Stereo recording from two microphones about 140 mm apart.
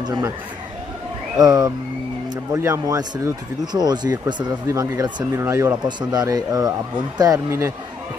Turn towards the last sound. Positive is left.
turn(degrees=-20)  # may be behind; listen again after turning